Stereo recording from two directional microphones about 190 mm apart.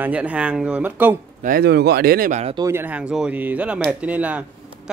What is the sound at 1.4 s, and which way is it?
Speech, 55° right (ahead or behind).